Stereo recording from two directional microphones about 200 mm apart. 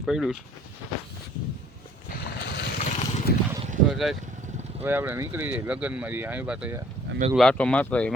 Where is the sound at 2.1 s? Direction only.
55° left (ahead or behind).